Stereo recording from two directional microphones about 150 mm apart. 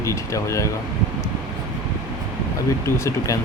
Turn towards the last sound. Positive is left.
turn(degrees=20)  # may be behind; listen again after turning